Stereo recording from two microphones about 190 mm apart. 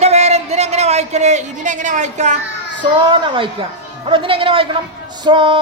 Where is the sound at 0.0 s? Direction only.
35° right (ahead or behind).